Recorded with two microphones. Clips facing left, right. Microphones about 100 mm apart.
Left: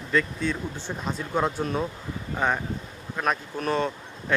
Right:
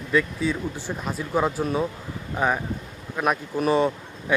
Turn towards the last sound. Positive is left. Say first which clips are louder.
# right 4 dB
turn(degrees=-10)  # may be behind; listen again after turning